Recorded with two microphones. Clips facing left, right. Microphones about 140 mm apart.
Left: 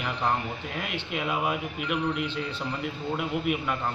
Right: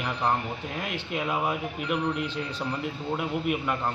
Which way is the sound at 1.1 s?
Centre (ahead or behind).